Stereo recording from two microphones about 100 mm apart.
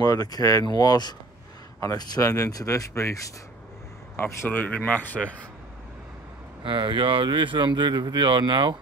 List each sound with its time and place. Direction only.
0.0 s speech: 40° left (ahead or behind); by 5.3 s 15° left (ahead or behind)
6.6 s speech: 55° right (ahead or behind)